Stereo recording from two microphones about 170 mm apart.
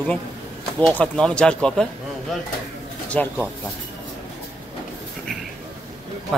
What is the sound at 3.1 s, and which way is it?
Speech, 10° left (ahead or behind).